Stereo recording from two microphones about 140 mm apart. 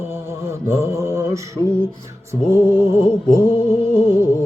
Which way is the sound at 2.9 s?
20° right (ahead or behind).